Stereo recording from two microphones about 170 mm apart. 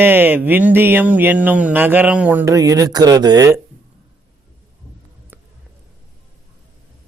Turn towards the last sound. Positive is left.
turn(degrees=-10)  # may be behind; listen again after turning